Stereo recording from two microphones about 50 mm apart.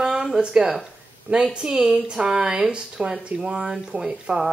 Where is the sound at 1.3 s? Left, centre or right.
Right.